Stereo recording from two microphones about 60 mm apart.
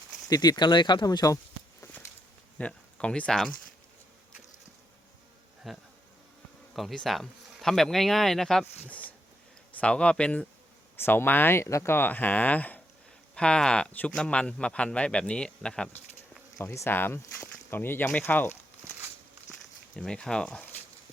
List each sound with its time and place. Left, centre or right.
0.3 s speech: left
2.6 s speech: centre
5.7 s speech: centre
8.9 s a sound: left
9.7 s a man's voice: centre
11.0 s speech: left
13.3 s speech: centre
16.6 s a man's voice: left
20.0 s speech: centre